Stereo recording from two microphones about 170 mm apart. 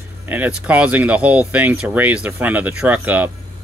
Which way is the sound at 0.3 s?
10° right (ahead or behind).